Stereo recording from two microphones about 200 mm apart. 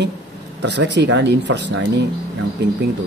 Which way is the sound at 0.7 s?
60° right (ahead or behind).